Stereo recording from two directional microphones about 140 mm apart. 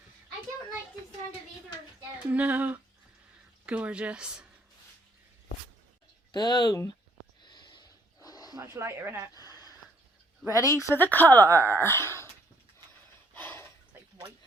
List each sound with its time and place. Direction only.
2.1 s speech: 10° right (ahead or behind)
6.3 s speech: 30° left (ahead or behind)
7.4 s a sound: 30° left (ahead or behind)
8.5 s speech: 20° right (ahead or behind)
10.5 s speech: 25° left (ahead or behind)
11.1 s speech: 15° left (ahead or behind)
11.4 s speech: 20° right (ahead or behind)
11.8 s speech: 20° left (ahead or behind)
13.3 s a sound: 15° left (ahead or behind)
13.9 s a sound: 15° right (ahead or behind)